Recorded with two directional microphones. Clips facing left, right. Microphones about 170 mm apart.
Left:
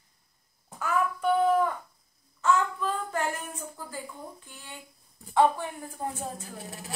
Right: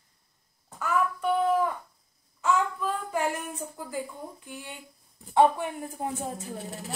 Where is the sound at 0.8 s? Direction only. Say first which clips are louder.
Right 1 dB; centre (ahead or behind).